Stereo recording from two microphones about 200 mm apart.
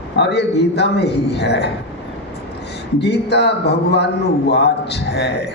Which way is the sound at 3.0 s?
55° left (ahead or behind).